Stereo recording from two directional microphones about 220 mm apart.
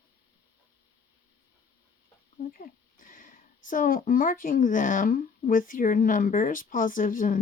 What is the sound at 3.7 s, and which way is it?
Speech, 40° left (ahead or behind).